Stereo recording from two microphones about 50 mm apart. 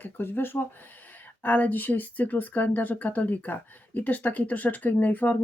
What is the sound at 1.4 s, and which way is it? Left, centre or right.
Speech, left.